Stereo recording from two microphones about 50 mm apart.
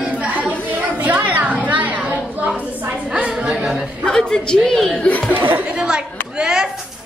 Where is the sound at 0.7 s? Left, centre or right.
Right.